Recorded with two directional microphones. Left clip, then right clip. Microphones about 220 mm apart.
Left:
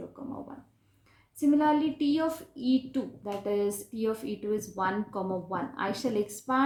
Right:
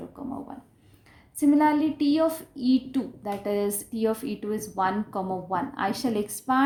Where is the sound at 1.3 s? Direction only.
45° right (ahead or behind).